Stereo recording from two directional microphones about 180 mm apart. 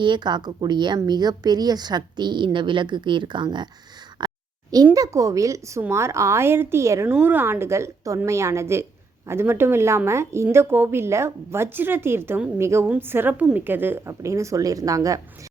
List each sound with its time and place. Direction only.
0.0 s a woman's voice: 25° right (ahead or behind)
4.2 s a sound: 25° right (ahead or behind)
4.9 s a woman's voice: 15° right (ahead or behind)